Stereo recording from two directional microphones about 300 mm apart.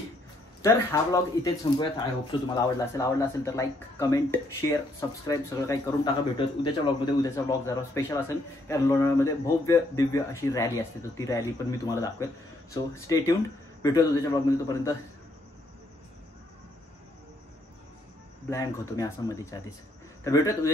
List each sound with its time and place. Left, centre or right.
0.6 s speech: centre
18.5 s speech: centre